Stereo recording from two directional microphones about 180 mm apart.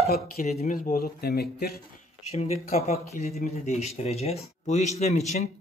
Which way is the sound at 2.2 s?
40° left (ahead or behind).